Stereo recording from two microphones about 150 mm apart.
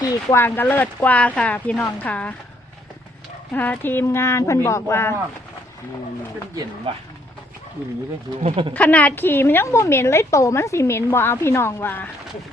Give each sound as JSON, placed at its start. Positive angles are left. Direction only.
{"t": 0.0, "sound": "a woman's voice", "side_deg": 25}
{"t": 3.5, "sound": "a woman's voice", "side_deg": 10}
{"t": 6.9, "sound": "speech", "side_deg": -35}
{"t": 8.4, "sound": "speech", "side_deg": -40}
{"t": 8.7, "sound": "a woman's voice", "side_deg": 10}